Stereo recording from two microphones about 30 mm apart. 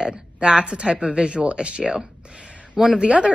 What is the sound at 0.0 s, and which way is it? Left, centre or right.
A woman's voice, right.